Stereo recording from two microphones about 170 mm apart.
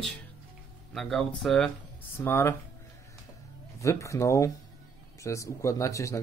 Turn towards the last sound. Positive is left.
turn(degrees=20)  # may be behind; listen again after turning